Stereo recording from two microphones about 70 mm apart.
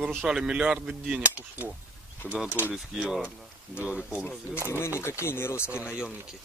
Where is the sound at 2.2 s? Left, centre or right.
Centre.